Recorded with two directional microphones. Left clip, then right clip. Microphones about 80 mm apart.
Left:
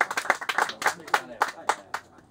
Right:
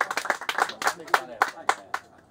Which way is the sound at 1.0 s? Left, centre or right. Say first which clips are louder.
Right 2 dB; right.